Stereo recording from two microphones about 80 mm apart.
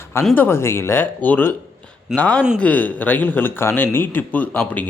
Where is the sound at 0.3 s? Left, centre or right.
Left.